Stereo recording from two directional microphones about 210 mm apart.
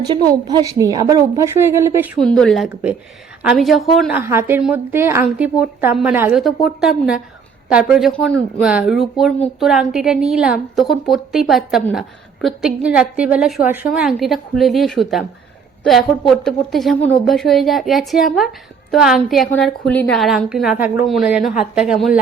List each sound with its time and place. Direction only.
0.0 s a woman's voice: 20° right (ahead or behind)
2.2 s a woman's voice: 5° left (ahead or behind)
4.2 s a woman's voice: 10° right (ahead or behind)